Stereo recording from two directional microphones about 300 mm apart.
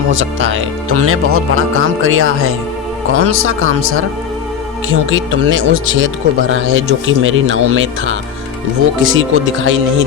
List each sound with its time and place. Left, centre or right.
0.1 s speech: right